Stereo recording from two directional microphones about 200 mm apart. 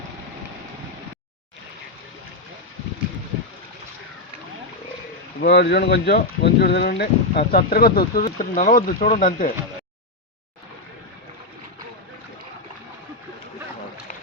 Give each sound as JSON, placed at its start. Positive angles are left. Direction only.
{"t": 5.4, "sound": "speech", "side_deg": 55}